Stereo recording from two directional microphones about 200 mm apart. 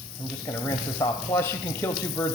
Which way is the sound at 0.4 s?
10° left (ahead or behind).